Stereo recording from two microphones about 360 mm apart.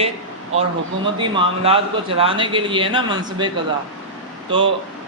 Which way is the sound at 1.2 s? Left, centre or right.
Centre.